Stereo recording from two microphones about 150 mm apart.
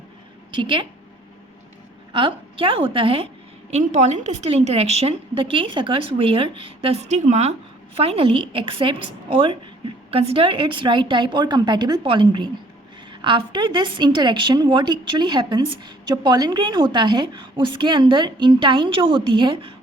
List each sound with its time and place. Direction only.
0.5 s a woman's voice: 30° right (ahead or behind)
2.1 s a woman's voice: 35° right (ahead or behind)
3.7 s a woman's voice: 50° right (ahead or behind); by 19.7 s 35° right (ahead or behind)